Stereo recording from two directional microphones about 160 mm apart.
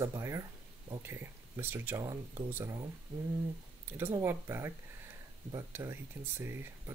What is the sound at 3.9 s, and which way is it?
Speech, 15° right (ahead or behind).